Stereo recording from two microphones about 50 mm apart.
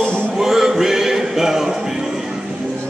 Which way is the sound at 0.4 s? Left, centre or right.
Centre.